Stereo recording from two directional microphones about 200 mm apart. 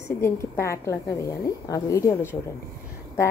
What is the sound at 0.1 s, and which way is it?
A woman's voice, 15° left (ahead or behind).